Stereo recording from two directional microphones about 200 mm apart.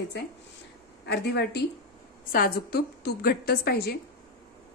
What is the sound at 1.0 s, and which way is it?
A woman's voice, 55° left (ahead or behind).